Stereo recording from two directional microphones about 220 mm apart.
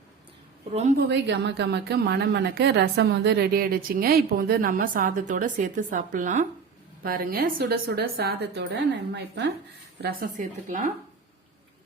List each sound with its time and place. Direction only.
0.7 s a woman's voice: 30° right (ahead or behind)
0.9 s a woman's voice: 50° right (ahead or behind); by 10.9 s 35° right (ahead or behind)